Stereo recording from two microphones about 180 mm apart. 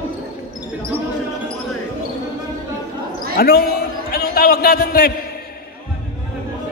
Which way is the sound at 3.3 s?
55° left (ahead or behind).